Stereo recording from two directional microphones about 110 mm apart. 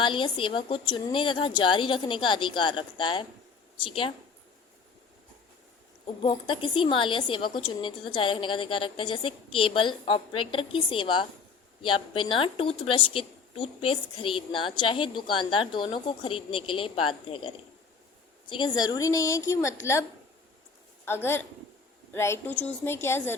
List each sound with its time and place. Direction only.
0.0 s a woman's voice: 50° left (ahead or behind)
6.2 s a woman's voice: 50° left (ahead or behind); by 23.3 s 20° left (ahead or behind)